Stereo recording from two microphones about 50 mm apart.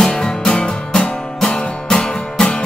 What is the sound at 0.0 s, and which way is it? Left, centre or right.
Music, centre.